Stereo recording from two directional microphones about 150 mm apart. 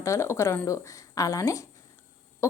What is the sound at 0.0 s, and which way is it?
Speech, 20° left (ahead or behind).